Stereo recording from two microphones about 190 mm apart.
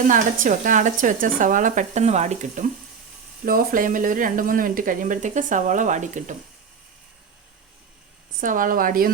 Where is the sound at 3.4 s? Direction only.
45° right (ahead or behind).